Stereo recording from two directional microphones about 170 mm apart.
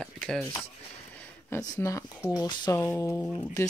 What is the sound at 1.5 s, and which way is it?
Speech, 15° left (ahead or behind).